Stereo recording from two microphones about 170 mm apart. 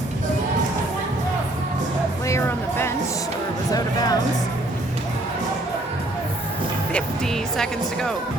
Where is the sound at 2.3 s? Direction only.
15° left (ahead or behind).